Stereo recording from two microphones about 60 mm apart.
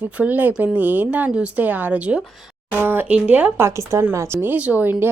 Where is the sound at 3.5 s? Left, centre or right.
Right.